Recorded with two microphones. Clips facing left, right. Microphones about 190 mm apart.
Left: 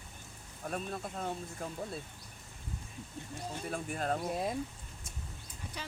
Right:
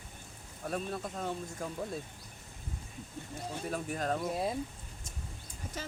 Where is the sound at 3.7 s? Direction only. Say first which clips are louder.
Right 1 dB; 40° right (ahead or behind).